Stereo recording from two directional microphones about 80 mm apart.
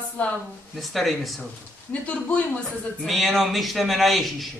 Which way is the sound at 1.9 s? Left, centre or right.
Centre.